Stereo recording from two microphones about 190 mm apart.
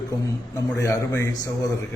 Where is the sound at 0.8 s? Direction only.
15° left (ahead or behind).